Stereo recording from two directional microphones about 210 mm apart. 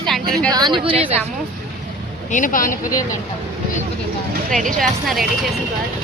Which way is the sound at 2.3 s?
40° left (ahead or behind).